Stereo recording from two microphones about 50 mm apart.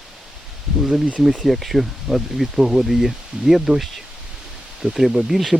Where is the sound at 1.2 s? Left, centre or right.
Centre.